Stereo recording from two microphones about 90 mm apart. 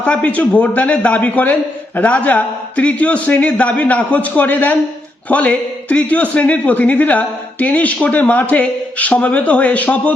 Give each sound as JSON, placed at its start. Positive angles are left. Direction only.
{"t": 0.0, "sound": "a man's voice", "side_deg": 15}